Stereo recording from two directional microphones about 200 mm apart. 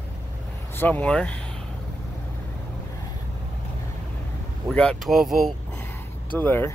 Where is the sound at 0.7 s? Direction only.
10° left (ahead or behind).